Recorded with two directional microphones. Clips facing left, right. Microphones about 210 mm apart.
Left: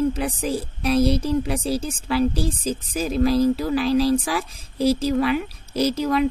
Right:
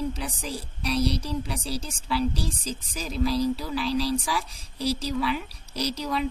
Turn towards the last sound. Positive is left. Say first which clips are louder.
# left 8 dB
turn(degrees=50)  # may be behind; listen again after turning